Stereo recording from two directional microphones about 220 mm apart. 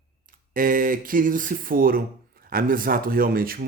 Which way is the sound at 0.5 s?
40° right (ahead or behind).